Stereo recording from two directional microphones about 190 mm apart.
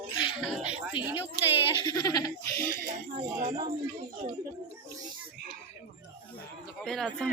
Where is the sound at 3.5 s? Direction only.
20° right (ahead or behind).